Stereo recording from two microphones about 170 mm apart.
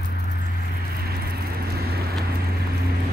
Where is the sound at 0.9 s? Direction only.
65° right (ahead or behind).